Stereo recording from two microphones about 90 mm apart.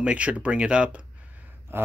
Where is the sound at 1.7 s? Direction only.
25° right (ahead or behind).